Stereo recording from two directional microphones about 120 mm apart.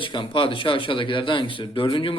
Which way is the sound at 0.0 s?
45° left (ahead or behind).